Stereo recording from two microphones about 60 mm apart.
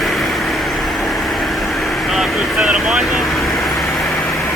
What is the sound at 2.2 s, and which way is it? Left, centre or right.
Vehicle, centre.